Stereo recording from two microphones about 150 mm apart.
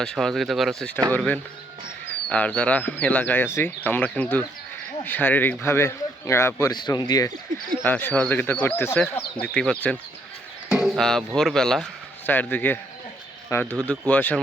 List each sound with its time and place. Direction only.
0.0 s a man's voice: 5° left (ahead or behind); by 7.3 s 25° left (ahead or behind)
7.9 s a man's voice: 10° left (ahead or behind)
10.7 s a sound: 5° right (ahead or behind)
11.3 s a man's voice: 5° left (ahead or behind)